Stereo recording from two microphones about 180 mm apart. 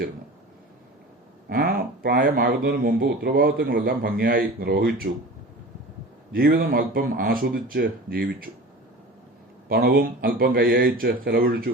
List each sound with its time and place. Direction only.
1.5 s speech: 55° right (ahead or behind)
6.3 s speech: 55° right (ahead or behind)
9.6 s speech: 55° right (ahead or behind)